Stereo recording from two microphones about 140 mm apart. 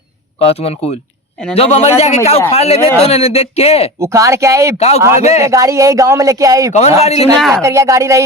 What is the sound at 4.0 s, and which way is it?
Speech, 20° right (ahead or behind).